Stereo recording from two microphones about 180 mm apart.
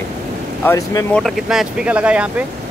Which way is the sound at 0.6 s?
20° left (ahead or behind).